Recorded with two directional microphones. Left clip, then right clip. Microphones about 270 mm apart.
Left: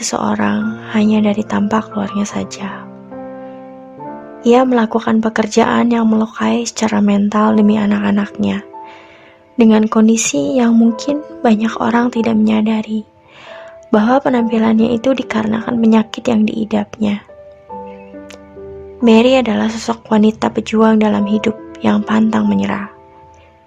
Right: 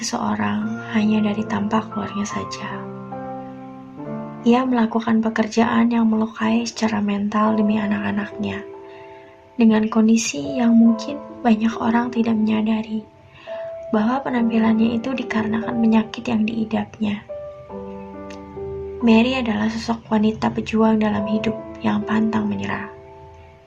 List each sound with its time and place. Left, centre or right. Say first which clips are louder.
0.0 s speech: left 6 dB; left
4.4 s speech: left 8 dB; left
13.9 s speech: left 9 dB; left
19.0 s speech: left 8 dB; left